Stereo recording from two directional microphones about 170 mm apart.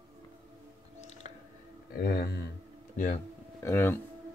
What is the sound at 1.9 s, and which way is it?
Speech, 60° left (ahead or behind).